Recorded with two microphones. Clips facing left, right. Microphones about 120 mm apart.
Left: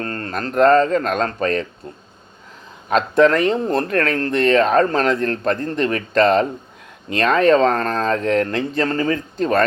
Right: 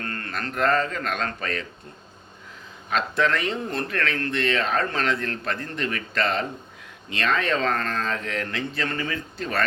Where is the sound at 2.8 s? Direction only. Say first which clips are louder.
Left 9 dB; 45° left (ahead or behind).